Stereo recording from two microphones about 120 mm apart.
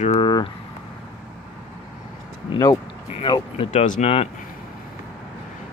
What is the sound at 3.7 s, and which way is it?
Speech, 90° left.